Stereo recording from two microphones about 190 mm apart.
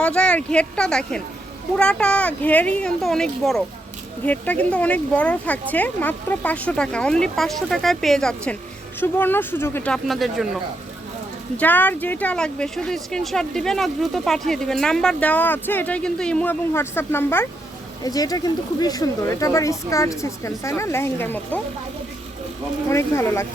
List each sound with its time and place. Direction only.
0.0 s speech: 5° left (ahead or behind)
11.5 s speech: 10° left (ahead or behind)
22.9 s speech: 15° left (ahead or behind)